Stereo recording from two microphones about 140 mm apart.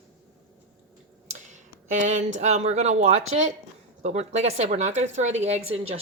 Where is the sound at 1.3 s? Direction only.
60° right (ahead or behind).